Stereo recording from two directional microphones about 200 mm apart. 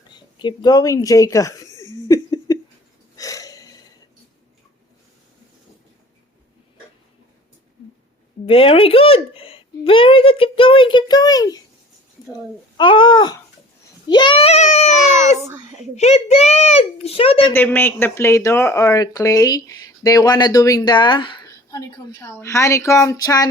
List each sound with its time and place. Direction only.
0.3 s chuckle: 20° left (ahead or behind)
3.2 s burping: 15° left (ahead or behind)
8.4 s a child's voice: 30° left (ahead or behind)
15.4 s a child's voice: 15° right (ahead or behind)
16.0 s a child's voice: 35° left (ahead or behind)
17.5 s speech: 10° left (ahead or behind)